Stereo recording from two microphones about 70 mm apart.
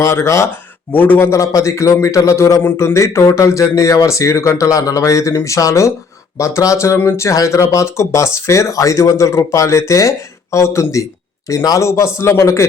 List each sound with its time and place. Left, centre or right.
0.0 s speech: left
0.9 s a man's voice: left
1.3 s speech: left
11.4 s speech: left
11.8 s a man's voice: left